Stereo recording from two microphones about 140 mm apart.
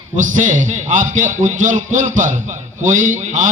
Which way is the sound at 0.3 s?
65° right (ahead or behind).